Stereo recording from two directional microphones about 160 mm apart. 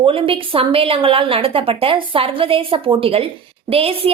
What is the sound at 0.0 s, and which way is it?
A woman's voice, 35° right (ahead or behind).